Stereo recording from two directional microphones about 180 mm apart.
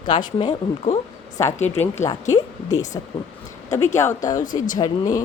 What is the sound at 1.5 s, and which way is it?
Speech, 40° left (ahead or behind).